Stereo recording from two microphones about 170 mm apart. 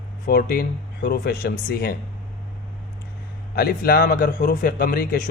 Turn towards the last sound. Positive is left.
turn(degrees=60)  # may be behind; listen again after turning